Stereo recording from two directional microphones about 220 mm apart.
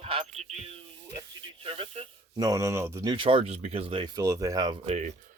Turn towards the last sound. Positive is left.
turn(degrees=-30)  # may be behind; listen again after turning